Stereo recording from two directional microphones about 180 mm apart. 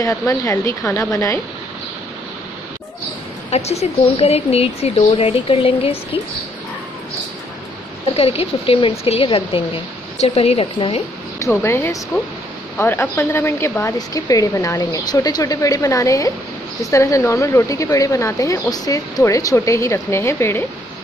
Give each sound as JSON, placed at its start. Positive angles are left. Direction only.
{"t": 0.0, "sound": "speech", "side_deg": 15}
{"t": 3.4, "sound": "speech", "side_deg": 35}
{"t": 8.2, "sound": "speech", "side_deg": 35}
{"t": 11.3, "sound": "speech", "side_deg": 15}